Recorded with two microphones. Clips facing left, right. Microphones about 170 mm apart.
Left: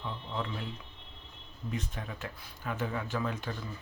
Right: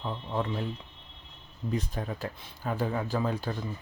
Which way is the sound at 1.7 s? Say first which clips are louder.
Right 6 dB; 35° right (ahead or behind).